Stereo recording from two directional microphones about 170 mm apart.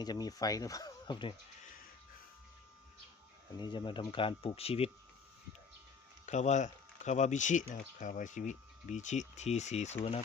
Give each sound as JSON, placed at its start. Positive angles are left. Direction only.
{"t": 0.0, "sound": "speech", "side_deg": 20}
{"t": 3.6, "sound": "speech", "side_deg": 25}
{"t": 6.2, "sound": "speech", "side_deg": 45}